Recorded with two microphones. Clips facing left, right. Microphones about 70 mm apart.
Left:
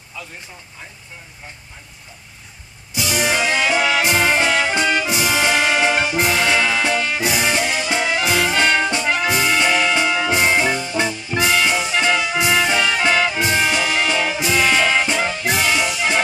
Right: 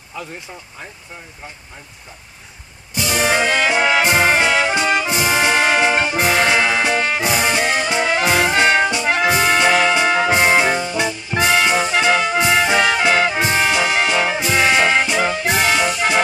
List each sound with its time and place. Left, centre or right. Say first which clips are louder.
3.2 s music: right 2 dB; right
3.6 s music: right 2 dB; right
4.2 s brass instrument: right 2 dB; right
6.1 s music: right 2 dB; right
6.5 s music: right 2 dB; right
8.5 s brass instrument: right 2 dB; right
10.0 s music: right 3 dB; right
11.0 s music: even; centre
11.3 s music: right 2 dB; right
15.6 s music: right 2 dB; right